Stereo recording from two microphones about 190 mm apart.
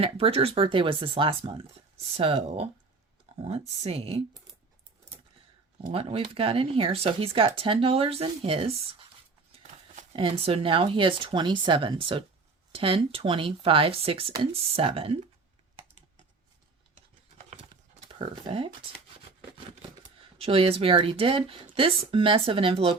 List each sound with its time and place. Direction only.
0.0 s speech: 30° right (ahead or behind)
3.3 s a sound: 35° right (ahead or behind)
3.8 s speech: 30° right (ahead or behind)
5.9 s speech: 30° right (ahead or behind)
16.9 s computer keyboard: 35° right (ahead or behind)
20.0 s speech: 30° right (ahead or behind)